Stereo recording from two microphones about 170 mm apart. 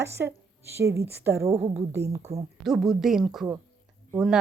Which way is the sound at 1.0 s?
80° right.